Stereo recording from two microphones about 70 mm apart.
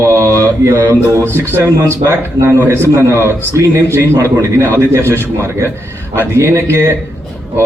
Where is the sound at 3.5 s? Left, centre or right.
Right.